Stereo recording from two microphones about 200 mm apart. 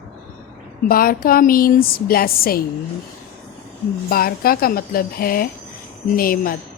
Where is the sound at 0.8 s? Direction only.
45° left (ahead or behind).